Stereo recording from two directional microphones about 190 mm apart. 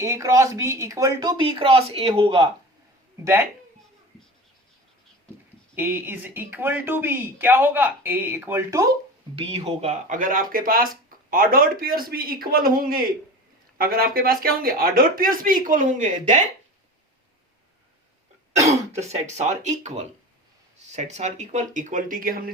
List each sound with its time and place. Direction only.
0.0 s speech: 15° right (ahead or behind)
5.7 s speech: 10° right (ahead or behind)
9.4 s speech: 30° right (ahead or behind)
18.6 s speech: 35° right (ahead or behind)